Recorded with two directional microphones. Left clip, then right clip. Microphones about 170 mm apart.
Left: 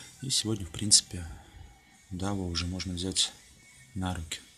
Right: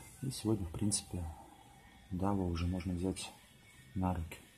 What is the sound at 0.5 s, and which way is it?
Speech, 15° left (ahead or behind).